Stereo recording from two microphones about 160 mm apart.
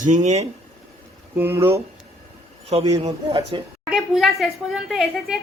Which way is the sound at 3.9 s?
Centre (ahead or behind).